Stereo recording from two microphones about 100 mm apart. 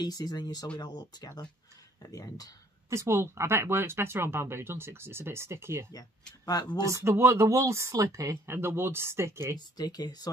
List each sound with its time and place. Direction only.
0.0 s speech: 40° left (ahead or behind)
2.9 s speech: 25° right (ahead or behind)
6.4 s speech: 45° left (ahead or behind)
7.0 s speech: 25° right (ahead or behind)
9.8 s speech: 40° left (ahead or behind)